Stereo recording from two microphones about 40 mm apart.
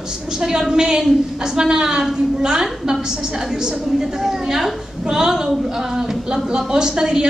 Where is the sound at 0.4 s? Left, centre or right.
Centre.